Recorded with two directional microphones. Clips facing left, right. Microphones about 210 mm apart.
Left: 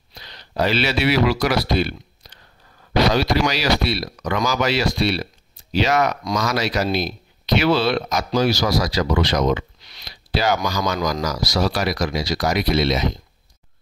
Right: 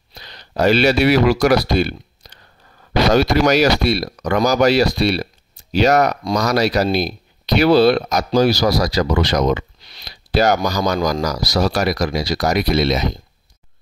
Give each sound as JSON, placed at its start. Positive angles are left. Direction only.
{"t": 0.1, "sound": "speech", "side_deg": -45}